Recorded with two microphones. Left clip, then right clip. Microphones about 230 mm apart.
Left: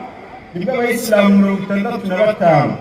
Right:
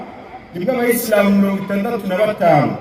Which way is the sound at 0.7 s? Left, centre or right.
Right.